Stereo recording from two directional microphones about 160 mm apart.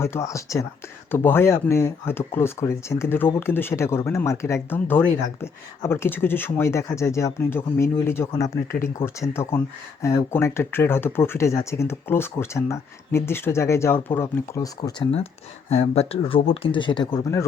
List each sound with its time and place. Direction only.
0.0 s speech: 15° left (ahead or behind)